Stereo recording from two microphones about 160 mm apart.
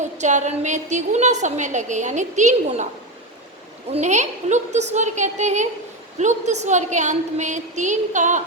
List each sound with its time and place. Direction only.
0.2 s a woman's voice: 50° right (ahead or behind)
3.9 s a woman's voice: 45° right (ahead or behind)